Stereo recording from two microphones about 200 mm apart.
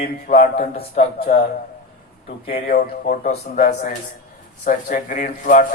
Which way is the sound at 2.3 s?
30° left (ahead or behind).